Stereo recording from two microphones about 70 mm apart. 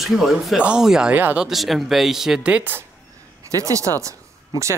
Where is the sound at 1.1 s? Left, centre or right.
Right.